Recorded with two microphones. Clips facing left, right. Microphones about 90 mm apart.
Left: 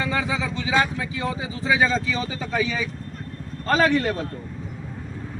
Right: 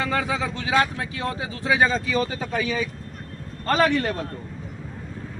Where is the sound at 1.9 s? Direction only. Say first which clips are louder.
Right 1 dB; 50° right (ahead or behind).